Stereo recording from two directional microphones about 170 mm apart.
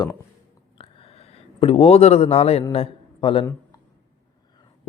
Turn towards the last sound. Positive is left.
turn(degrees=30)  # may be behind; listen again after turning